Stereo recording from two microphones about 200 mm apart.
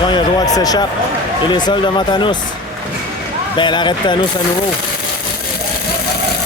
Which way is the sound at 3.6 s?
25° left (ahead or behind).